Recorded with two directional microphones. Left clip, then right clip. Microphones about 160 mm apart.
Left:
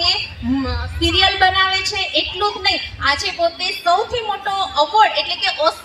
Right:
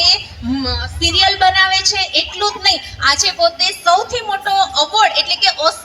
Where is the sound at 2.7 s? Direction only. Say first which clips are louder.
Right 6 dB; 25° left (ahead or behind).